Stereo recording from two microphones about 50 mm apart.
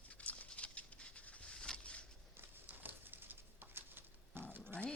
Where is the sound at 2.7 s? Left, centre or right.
Right.